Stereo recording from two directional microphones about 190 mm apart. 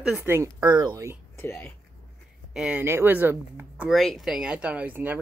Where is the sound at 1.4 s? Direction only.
15° left (ahead or behind).